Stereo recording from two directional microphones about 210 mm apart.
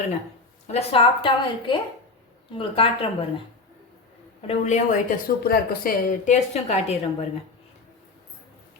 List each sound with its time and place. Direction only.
0.7 s a woman's voice: 30° left (ahead or behind)
4.4 s a woman's voice: 35° left (ahead or behind)